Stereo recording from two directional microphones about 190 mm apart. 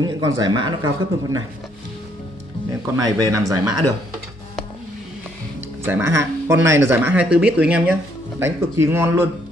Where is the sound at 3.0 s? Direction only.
20° right (ahead or behind).